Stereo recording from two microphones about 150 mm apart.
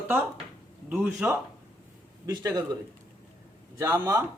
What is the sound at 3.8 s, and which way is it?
Speech, 20° right (ahead or behind).